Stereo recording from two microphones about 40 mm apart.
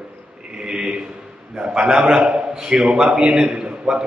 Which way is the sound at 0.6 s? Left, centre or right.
Centre.